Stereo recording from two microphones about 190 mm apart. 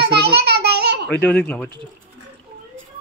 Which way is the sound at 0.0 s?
55° right (ahead or behind).